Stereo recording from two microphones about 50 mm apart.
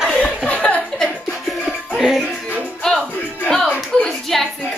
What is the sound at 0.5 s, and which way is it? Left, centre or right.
Chuckle, left.